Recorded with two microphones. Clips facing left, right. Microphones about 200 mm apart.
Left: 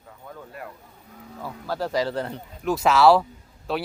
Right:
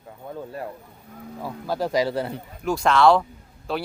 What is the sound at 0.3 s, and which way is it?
Speech, 30° right (ahead or behind).